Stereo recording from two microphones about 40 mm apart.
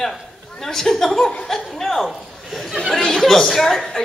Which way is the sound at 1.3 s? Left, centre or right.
Centre.